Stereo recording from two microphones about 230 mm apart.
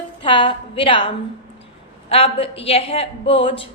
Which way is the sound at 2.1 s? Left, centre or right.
Left.